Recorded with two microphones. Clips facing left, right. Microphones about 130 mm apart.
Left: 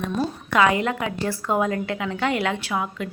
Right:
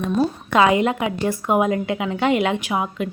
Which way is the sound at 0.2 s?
20° right (ahead or behind).